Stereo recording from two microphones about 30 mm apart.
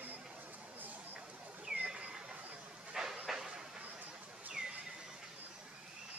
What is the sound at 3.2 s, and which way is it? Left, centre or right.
Train, centre.